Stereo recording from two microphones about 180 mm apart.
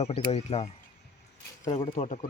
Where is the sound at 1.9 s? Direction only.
45° left (ahead or behind).